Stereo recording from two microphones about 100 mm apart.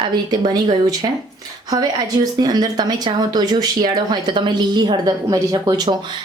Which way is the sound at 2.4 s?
45° right (ahead or behind).